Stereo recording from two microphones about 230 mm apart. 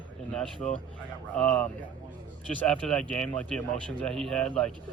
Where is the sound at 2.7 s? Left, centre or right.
Centre.